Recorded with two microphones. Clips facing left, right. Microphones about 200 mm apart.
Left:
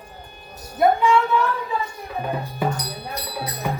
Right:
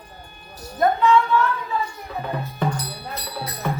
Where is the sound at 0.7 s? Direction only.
10° left (ahead or behind).